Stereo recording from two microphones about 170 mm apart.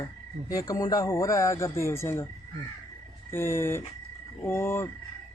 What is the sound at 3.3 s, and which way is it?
Speech, 15° left (ahead or behind).